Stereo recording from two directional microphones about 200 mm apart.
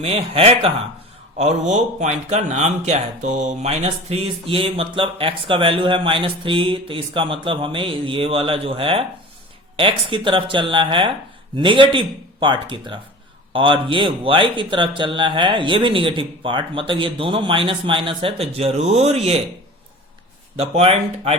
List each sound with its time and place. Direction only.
0.0 s speech: 30° right (ahead or behind)
20.6 s speech: 30° right (ahead or behind)